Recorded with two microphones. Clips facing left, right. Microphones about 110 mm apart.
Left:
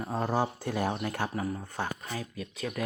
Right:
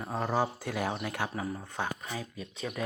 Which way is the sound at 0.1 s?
10° left (ahead or behind).